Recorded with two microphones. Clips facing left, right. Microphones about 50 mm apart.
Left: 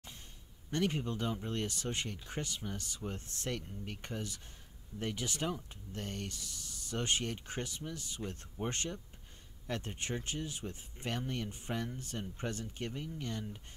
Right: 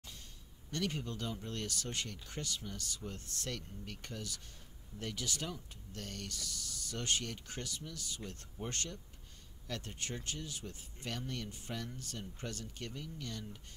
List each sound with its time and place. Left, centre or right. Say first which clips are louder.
0.7 s speech: left 4 dB; left